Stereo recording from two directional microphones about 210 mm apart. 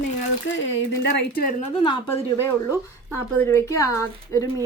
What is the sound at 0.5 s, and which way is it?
A woman's voice, 55° left (ahead or behind).